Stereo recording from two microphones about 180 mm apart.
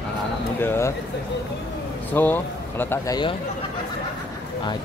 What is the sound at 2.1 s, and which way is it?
Speech, 10° left (ahead or behind).